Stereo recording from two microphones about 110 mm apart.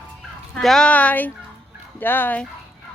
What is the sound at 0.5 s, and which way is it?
Speech, 5° left (ahead or behind).